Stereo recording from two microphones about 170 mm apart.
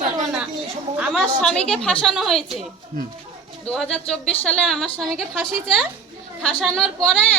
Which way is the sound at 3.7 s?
5° left (ahead or behind).